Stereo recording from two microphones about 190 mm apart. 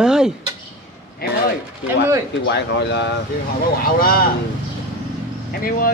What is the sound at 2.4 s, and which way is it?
Speech, 65° left (ahead or behind).